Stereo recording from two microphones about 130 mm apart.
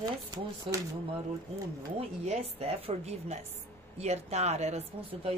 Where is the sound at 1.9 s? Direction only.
55° right (ahead or behind).